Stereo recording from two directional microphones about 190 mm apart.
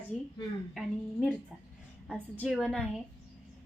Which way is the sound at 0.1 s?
40° left (ahead or behind).